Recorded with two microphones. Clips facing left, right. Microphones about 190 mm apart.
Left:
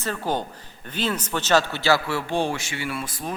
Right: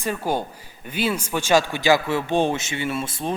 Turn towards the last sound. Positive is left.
turn(degrees=-25)  # may be behind; listen again after turning